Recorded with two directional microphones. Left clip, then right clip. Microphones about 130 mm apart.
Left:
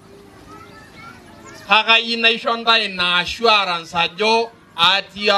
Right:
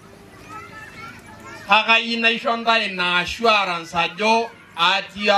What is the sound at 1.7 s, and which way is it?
A man's voice, 20° left (ahead or behind).